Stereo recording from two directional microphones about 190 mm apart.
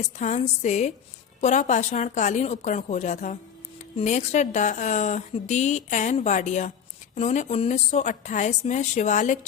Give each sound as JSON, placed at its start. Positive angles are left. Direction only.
{"t": 0.2, "sound": "a woman's voice", "side_deg": 40}